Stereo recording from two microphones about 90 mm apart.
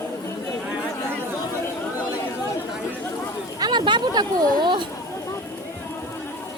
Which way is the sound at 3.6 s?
55° right (ahead or behind).